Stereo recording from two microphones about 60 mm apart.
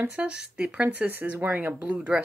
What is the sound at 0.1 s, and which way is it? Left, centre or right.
Speech, centre.